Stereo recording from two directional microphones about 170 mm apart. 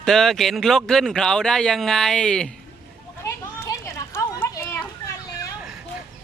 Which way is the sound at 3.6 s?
20° left (ahead or behind).